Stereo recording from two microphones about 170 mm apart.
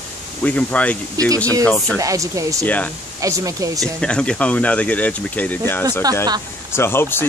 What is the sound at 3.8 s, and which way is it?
Speech, 5° left (ahead or behind).